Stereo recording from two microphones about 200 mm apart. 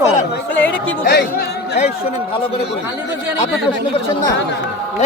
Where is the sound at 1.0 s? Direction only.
50° left (ahead or behind).